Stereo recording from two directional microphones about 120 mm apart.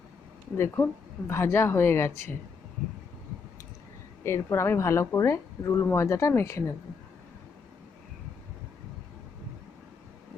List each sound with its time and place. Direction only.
0.5 s speech: 20° left (ahead or behind)
4.2 s speech: 20° left (ahead or behind)